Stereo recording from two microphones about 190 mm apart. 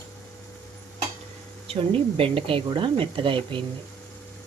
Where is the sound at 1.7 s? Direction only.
30° right (ahead or behind).